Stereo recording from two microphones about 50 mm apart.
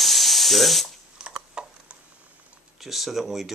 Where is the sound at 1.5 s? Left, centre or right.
Right.